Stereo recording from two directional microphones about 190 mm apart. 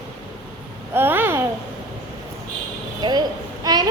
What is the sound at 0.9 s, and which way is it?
Babbling, 10° right (ahead or behind).